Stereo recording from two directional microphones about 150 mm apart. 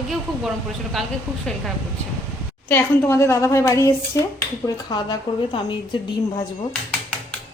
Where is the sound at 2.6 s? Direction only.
15° left (ahead or behind).